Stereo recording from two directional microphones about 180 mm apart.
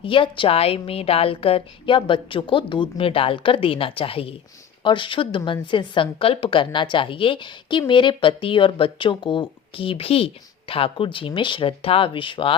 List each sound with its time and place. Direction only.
0.0 s a woman's voice: 30° left (ahead or behind)